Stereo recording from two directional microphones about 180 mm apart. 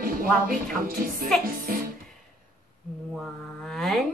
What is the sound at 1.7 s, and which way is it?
Music, 55° right (ahead or behind).